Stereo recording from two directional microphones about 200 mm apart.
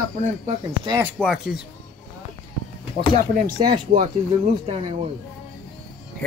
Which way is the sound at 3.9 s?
35° right (ahead or behind).